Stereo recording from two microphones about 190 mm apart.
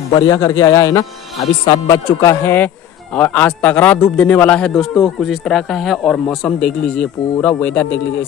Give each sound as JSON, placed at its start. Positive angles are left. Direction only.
{"t": 0.1, "sound": "a man's voice", "side_deg": 20}